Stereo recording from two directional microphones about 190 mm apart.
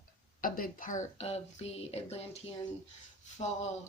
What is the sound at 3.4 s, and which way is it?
Speech, 30° left (ahead or behind).